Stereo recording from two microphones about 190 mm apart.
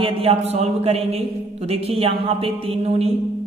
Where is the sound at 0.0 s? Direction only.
30° right (ahead or behind).